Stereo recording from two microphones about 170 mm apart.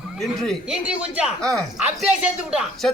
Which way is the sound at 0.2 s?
Centre (ahead or behind).